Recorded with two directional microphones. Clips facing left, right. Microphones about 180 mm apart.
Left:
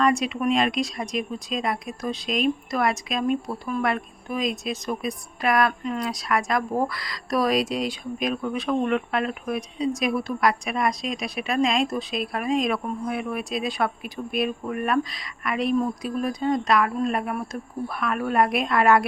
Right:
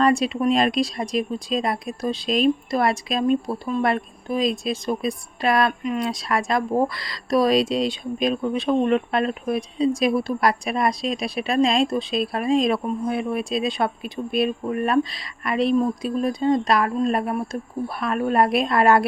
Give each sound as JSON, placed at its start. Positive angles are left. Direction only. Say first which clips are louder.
{"t": 0.0, "sound": "speech", "louder": "right 3 dB", "side_deg": -30}